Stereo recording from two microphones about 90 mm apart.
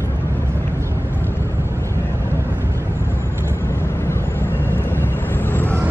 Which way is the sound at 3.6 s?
30° left (ahead or behind).